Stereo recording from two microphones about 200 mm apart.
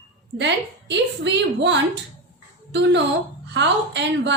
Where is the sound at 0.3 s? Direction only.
60° right (ahead or behind).